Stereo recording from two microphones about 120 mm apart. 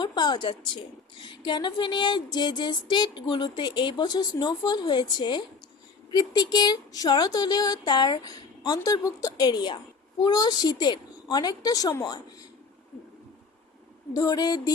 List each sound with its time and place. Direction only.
0.0 s speech: 35° left (ahead or behind)
14.1 s speech: 30° left (ahead or behind)